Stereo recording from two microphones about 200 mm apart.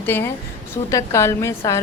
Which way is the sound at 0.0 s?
10° left (ahead or behind).